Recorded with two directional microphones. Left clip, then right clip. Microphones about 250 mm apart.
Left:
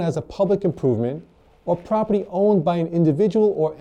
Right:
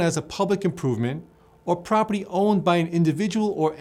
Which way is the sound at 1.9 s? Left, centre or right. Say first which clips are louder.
Left 1 dB; left.